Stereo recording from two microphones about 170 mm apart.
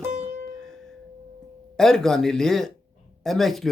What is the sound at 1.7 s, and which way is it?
Speech, centre (ahead or behind).